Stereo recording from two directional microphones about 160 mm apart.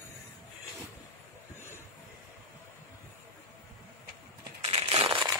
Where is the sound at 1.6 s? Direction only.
15° right (ahead or behind).